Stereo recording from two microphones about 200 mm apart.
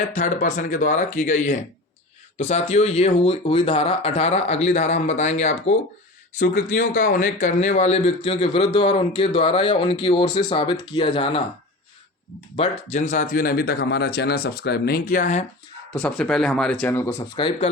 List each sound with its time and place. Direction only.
0.1 s speech: 40° left (ahead or behind)
12.5 s speech: 35° left (ahead or behind)
16.0 s speech: 5° left (ahead or behind)
17.3 s speech: 25° left (ahead or behind)